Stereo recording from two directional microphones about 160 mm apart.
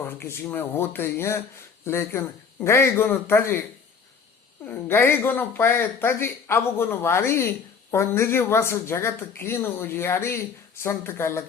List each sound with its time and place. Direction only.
0.0 s speech: 15° left (ahead or behind)
4.6 s speech: 15° left (ahead or behind)